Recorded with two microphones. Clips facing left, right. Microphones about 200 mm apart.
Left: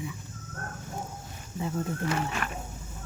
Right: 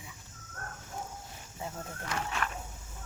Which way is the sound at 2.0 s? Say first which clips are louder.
Left 5 dB; 5° left (ahead or behind).